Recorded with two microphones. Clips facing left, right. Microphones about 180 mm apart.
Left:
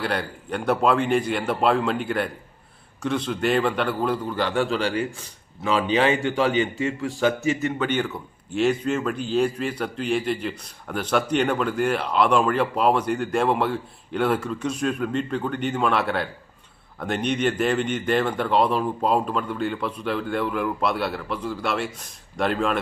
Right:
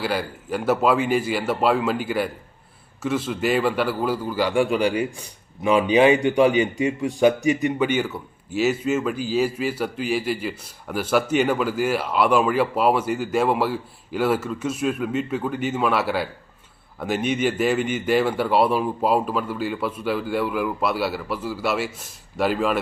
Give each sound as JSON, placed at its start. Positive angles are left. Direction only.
{"t": 0.0, "sound": "a man's voice", "side_deg": -5}